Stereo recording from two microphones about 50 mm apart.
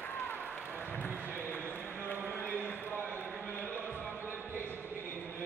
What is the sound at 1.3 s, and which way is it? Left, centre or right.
Basketball bounce, left.